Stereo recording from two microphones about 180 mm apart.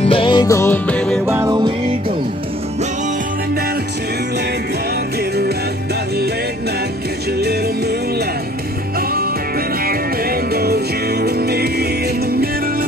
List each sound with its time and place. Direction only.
0.0 s music: 30° left (ahead or behind); by 1.2 s 5° left (ahead or behind)
1.2 s music: 15° right (ahead or behind)
9.8 s music: 55° right (ahead or behind)